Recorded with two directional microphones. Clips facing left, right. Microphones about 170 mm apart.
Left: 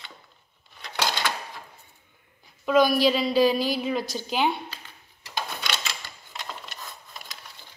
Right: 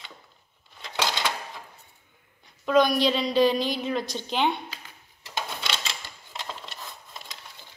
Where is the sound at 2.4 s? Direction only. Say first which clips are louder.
Left 1 dB; 5° left (ahead or behind).